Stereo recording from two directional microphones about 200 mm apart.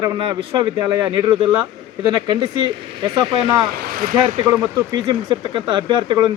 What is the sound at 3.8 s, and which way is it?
Speech, 45° right (ahead or behind).